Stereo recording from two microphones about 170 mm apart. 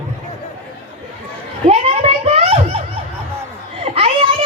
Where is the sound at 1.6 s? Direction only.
35° right (ahead or behind).